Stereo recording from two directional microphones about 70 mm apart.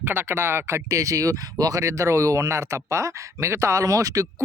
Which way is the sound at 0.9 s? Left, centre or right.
Right.